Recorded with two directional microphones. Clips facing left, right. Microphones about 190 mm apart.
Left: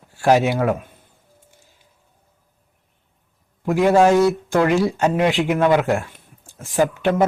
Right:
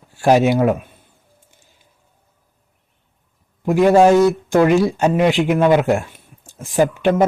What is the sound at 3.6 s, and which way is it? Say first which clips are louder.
A man's voice: right 3 dB; 20° right (ahead or behind).